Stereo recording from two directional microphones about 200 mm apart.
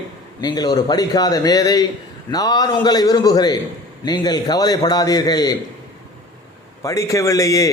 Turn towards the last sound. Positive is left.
turn(degrees=15)  # may be behind; listen again after turning